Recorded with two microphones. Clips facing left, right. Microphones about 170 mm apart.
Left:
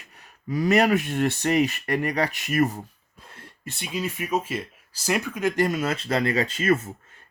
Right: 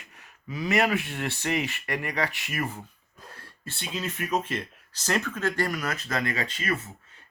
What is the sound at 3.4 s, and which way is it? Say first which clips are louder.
Speech: left 4 dB; 15° left (ahead or behind).